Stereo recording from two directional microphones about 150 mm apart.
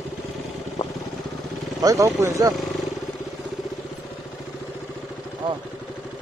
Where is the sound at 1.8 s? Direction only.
20° right (ahead or behind).